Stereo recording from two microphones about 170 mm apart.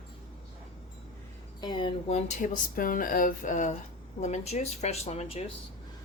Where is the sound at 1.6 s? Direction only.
25° left (ahead or behind).